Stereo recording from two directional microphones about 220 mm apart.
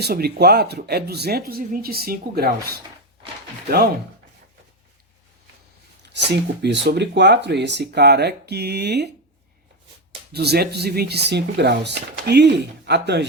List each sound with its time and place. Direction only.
0.0 s speech: 45° right (ahead or behind)
6.1 s speech: 50° right (ahead or behind)
10.3 s speech: 45° right (ahead or behind)